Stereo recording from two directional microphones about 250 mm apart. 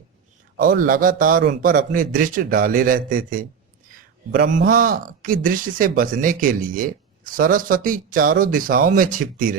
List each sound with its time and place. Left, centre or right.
0.5 s speech: right